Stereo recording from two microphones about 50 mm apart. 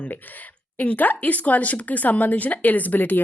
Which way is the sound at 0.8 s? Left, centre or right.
Left.